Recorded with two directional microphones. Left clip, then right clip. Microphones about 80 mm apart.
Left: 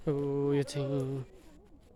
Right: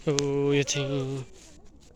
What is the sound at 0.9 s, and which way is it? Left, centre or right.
Speech, centre.